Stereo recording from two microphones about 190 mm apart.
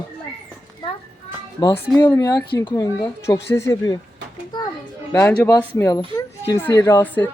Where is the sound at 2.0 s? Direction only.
20° left (ahead or behind).